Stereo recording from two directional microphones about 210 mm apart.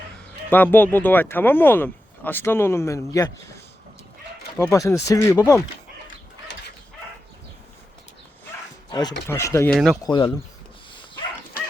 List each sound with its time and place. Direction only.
0.5 s speech: 10° left (ahead or behind)
4.5 s speech: 15° left (ahead or behind)
8.9 s speech: 20° left (ahead or behind)
9.7 s speech: centre (ahead or behind)
10.0 s speech: 20° left (ahead or behind)